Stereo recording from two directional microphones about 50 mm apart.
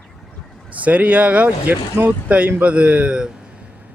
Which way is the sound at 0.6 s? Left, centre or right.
Right.